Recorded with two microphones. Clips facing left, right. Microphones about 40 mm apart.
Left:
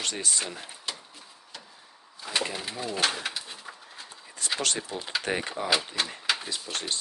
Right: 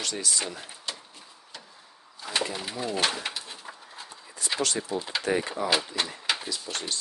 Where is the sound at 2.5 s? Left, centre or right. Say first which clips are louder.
Right 2 dB; centre.